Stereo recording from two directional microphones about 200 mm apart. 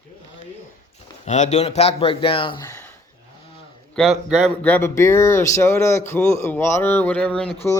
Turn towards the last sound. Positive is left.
turn(degrees=5)  # may be behind; listen again after turning